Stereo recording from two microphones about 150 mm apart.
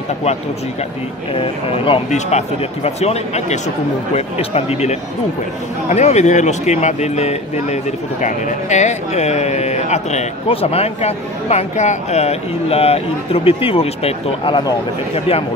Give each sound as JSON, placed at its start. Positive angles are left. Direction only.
{"t": 1.3, "sound": "speech", "side_deg": 40}